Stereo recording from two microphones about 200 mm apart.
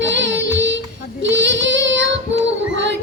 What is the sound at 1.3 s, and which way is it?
Child singing, 65° right (ahead or behind).